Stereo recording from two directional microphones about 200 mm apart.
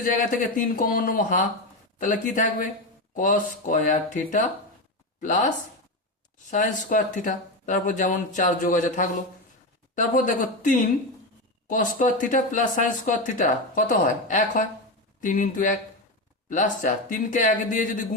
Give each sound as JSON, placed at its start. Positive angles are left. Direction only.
{"t": 0.0, "sound": "speech", "side_deg": 40}
{"t": 6.5, "sound": "speech", "side_deg": 40}